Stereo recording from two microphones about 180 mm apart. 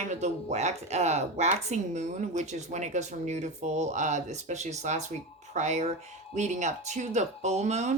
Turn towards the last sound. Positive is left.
turn(degrees=-40)  # may be behind; listen again after turning